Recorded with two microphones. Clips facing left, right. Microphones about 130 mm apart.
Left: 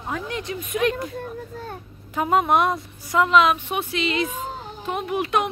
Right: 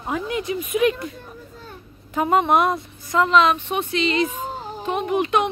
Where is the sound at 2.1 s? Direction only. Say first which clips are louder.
Right 1 dB; centre (ahead or behind).